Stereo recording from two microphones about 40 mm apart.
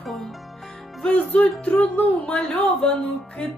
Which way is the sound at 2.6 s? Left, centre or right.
Left.